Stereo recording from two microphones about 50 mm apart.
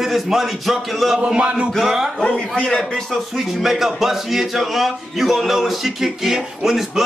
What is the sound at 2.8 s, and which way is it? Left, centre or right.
Speech, centre.